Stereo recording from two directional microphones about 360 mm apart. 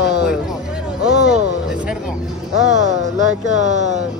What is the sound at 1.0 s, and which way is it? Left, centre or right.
Speech, centre.